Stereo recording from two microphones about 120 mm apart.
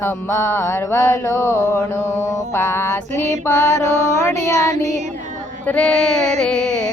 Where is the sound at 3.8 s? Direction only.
75° right (ahead or behind).